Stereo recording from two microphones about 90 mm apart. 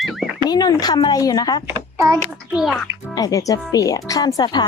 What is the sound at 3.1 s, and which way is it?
Speech, 40° left (ahead or behind).